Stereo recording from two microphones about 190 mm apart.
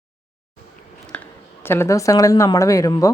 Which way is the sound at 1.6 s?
10° left (ahead or behind).